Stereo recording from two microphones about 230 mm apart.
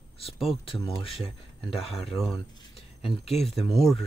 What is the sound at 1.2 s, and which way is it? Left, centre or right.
Speech, centre.